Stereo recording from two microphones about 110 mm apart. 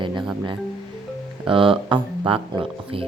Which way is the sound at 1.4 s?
50° right (ahead or behind).